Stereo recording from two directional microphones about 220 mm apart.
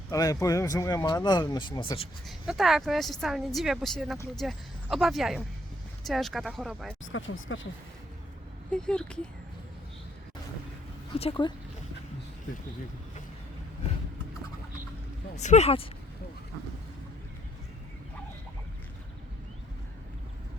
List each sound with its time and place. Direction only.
0.1 s speech: 15° left (ahead or behind)
2.2 s speech: centre (ahead or behind)
7.0 s speech: 60° left (ahead or behind)
8.7 s speech: 5° left (ahead or behind)
11.2 s speech: 25° left (ahead or behind)
15.4 s speech: 30° left (ahead or behind)